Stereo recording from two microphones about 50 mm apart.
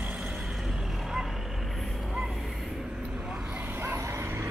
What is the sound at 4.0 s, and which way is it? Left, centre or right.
Vehicle, right.